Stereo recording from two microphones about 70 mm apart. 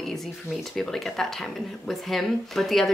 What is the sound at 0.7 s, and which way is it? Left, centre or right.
A woman's voice, centre.